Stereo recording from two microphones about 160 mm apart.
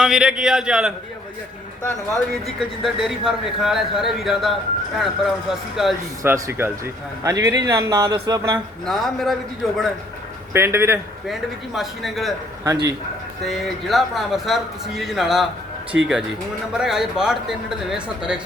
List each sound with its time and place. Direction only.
0.0 s a man's voice: 5° right (ahead or behind)
2.6 s a man's voice: centre (ahead or behind)
6.2 s speech: 15° right (ahead or behind)
8.8 s a man's voice: centre (ahead or behind)
10.5 s speech: 15° right (ahead or behind)
11.3 s a man's voice: centre (ahead or behind)
13.4 s a man's voice: centre (ahead or behind)